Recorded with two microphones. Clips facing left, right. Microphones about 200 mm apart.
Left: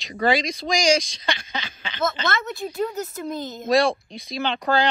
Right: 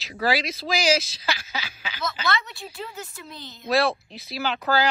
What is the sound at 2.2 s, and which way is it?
A woman's voice, 45° left (ahead or behind).